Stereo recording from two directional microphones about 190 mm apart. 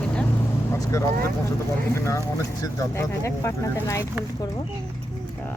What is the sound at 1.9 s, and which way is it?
Speech, 15° left (ahead or behind).